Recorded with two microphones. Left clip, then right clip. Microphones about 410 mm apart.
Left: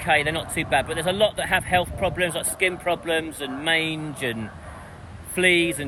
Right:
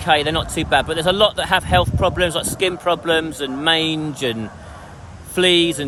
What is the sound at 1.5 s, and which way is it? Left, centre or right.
Speech, right.